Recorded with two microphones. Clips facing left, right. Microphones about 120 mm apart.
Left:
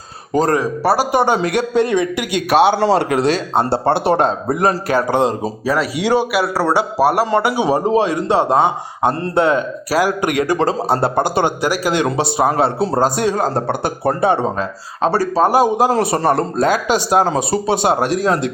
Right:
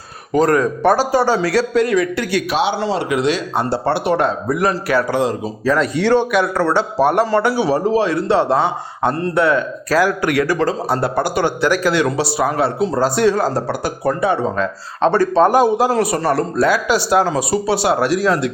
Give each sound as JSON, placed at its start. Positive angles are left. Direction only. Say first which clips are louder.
{"t": 0.3, "sound": "speech", "louder": "right 1 dB", "side_deg": 35}
{"t": 0.6, "sound": "a man's voice", "louder": "right 1 dB", "side_deg": 10}
{"t": 1.1, "sound": "speech", "louder": "even", "side_deg": 20}
{"t": 2.5, "sound": "a man's voice", "louder": "left 10 dB", "side_deg": 55}
{"t": 5.6, "sound": "a man's voice", "louder": "right 2 dB", "side_deg": 10}
{"t": 13.0, "sound": "a man's voice", "louder": "right 2 dB", "side_deg": 15}
{"t": 13.5, "sound": "speech", "louder": "left 1 dB", "side_deg": 55}
{"t": 14.2, "sound": "speech", "louder": "left 2 dB", "side_deg": 30}
{"t": 15.0, "sound": "a man's voice", "louder": "right 2 dB", "side_deg": 10}
{"t": 15.9, "sound": "speech", "louder": "left 1 dB", "side_deg": 25}